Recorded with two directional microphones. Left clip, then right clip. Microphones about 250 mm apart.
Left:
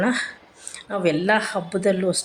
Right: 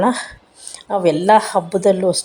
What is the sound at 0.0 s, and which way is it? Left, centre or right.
A woman's voice, centre.